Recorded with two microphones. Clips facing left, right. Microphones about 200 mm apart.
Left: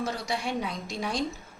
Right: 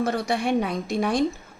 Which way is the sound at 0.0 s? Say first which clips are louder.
Right 7 dB; 55° right (ahead or behind).